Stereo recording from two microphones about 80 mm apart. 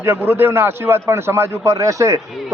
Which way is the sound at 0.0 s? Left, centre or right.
Right.